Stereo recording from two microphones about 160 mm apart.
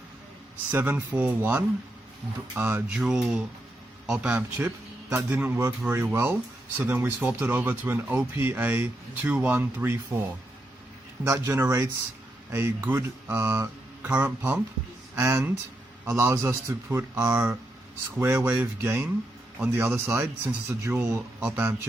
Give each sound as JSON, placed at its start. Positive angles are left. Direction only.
{"t": 0.7, "sound": "speech", "side_deg": -10}